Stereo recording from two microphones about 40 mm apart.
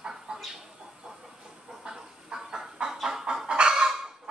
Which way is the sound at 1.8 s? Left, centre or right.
Centre.